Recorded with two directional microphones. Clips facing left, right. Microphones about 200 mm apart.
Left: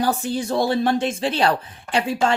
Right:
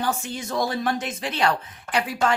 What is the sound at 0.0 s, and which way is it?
A woman's voice, 35° left (ahead or behind).